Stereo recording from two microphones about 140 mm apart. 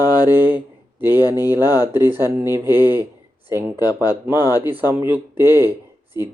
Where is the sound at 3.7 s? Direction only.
30° left (ahead or behind).